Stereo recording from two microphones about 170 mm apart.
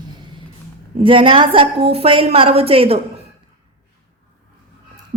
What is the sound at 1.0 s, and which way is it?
Speech, 30° right (ahead or behind).